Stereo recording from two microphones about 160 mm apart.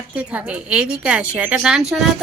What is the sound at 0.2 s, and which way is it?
Speech, 10° right (ahead or behind).